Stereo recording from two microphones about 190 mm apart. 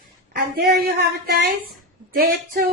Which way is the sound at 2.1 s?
50° right (ahead or behind).